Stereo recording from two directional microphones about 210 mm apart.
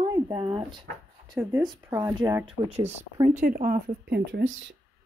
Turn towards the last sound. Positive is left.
turn(degrees=-65)  # may be behind; listen again after turning